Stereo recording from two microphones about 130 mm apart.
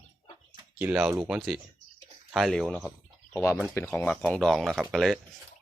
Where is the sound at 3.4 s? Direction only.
20° left (ahead or behind); by 5.2 s centre (ahead or behind).